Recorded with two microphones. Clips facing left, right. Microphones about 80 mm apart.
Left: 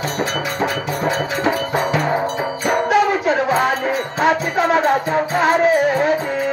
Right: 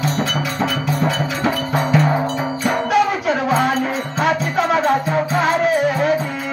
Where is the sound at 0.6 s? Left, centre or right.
Centre.